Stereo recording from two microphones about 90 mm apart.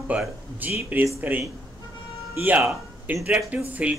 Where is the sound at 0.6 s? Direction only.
20° right (ahead or behind).